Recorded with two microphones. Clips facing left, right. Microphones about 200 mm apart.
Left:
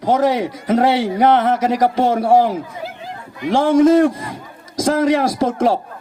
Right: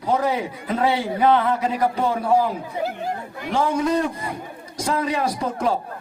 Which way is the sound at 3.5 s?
90° left.